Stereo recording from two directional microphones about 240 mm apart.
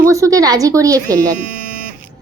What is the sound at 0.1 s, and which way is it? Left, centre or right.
Speech, centre.